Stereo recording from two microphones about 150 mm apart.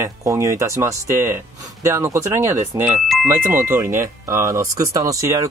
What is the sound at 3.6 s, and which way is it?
Speech, 15° right (ahead or behind).